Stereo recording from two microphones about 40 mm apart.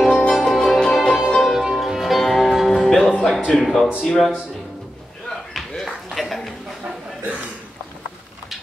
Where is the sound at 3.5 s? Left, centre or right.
Centre.